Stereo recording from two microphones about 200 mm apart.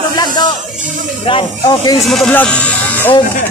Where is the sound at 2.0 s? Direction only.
Centre (ahead or behind).